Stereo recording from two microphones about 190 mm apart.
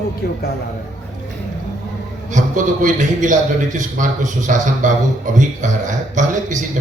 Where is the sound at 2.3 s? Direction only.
40° right (ahead or behind).